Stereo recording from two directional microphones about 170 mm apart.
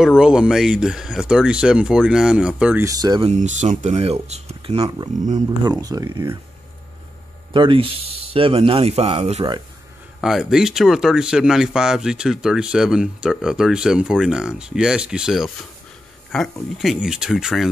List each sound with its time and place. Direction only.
0.2 s speech: 5° right (ahead or behind)
2.8 s speech: 20° right (ahead or behind)
3.3 s speech: 45° right (ahead or behind)
4.8 s speech: 25° right (ahead or behind)
7.5 s speech: 30° right (ahead or behind)
10.2 s speech: 5° right (ahead or behind)